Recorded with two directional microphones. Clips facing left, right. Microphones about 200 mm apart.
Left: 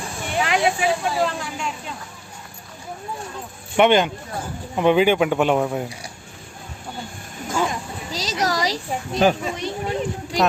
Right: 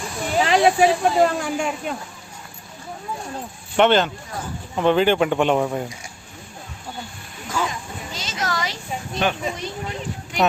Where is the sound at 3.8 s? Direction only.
10° left (ahead or behind).